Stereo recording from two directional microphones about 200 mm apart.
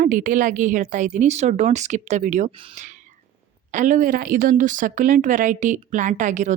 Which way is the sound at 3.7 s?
40° right (ahead or behind).